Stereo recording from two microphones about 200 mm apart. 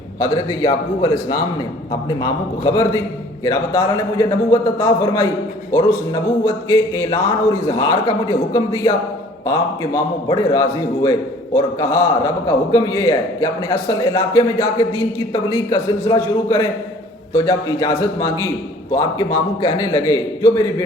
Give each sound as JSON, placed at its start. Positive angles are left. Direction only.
{"t": 0.2, "sound": "a man's voice", "side_deg": 20}